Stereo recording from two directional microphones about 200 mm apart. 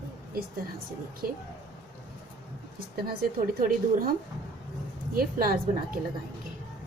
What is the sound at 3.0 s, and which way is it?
A woman's voice, 50° right (ahead or behind).